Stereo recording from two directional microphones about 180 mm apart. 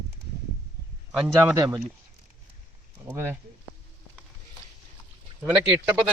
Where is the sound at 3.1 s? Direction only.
10° right (ahead or behind).